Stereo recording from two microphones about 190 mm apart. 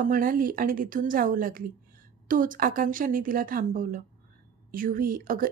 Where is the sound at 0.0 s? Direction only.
45° right (ahead or behind).